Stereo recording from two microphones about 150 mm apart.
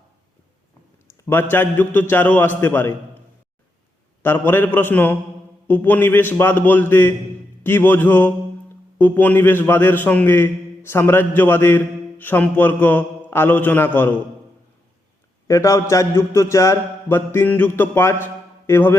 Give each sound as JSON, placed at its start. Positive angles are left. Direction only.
{"t": 1.3, "sound": "a man's voice", "side_deg": 15}
{"t": 4.2, "sound": "a man's voice", "side_deg": 15}
{"t": 15.4, "sound": "a man's voice", "side_deg": 20}